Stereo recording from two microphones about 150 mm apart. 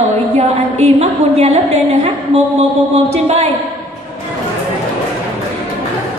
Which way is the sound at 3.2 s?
45° right (ahead or behind).